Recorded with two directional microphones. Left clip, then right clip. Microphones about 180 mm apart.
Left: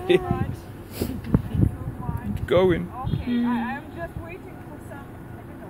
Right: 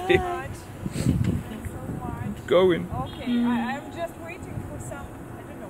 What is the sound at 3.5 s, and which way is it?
Speech, 50° right (ahead or behind).